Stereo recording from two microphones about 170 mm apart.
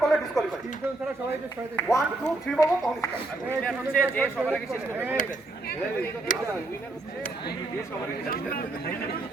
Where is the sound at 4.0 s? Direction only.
10° left (ahead or behind).